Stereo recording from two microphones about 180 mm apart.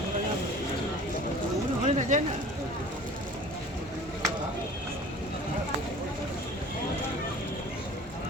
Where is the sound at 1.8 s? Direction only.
40° right (ahead or behind).